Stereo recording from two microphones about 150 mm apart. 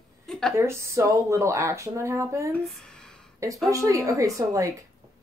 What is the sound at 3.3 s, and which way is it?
A woman's voice, 20° right (ahead or behind).